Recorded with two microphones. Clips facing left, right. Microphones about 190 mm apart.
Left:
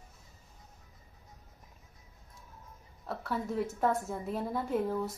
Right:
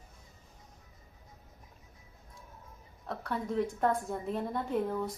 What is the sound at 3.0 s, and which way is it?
A woman's voice, 5° left (ahead or behind).